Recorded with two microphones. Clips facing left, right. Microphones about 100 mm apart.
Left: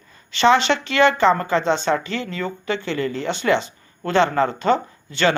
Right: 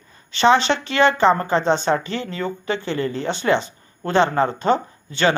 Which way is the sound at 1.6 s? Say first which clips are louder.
Right 1 dB; 45° right (ahead or behind).